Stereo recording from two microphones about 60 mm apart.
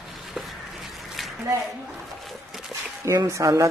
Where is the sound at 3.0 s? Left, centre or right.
Right.